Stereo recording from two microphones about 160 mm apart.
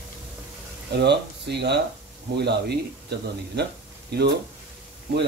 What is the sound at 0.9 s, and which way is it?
Speech, 90° right.